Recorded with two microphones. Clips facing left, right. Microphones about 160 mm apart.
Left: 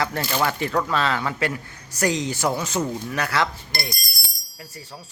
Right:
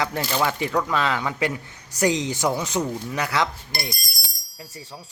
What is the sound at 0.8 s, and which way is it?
A man's voice, 15° right (ahead or behind).